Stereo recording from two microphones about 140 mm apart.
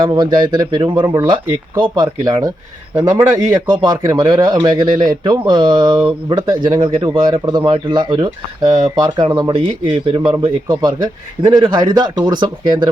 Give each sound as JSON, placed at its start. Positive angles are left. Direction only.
{"t": 0.1, "sound": "a man's voice", "side_deg": -30}